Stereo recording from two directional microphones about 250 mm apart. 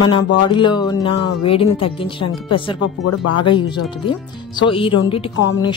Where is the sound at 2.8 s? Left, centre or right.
Left.